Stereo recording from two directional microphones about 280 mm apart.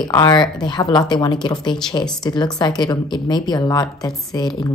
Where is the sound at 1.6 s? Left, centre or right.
Centre.